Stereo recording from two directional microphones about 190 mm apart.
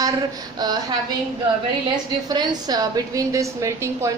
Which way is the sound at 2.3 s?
20° right (ahead or behind).